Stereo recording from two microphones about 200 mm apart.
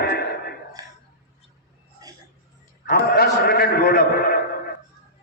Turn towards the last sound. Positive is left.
turn(degrees=50)  # may be behind; listen again after turning